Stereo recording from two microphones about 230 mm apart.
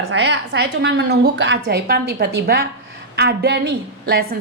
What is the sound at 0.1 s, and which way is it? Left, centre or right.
A woman's voice, right.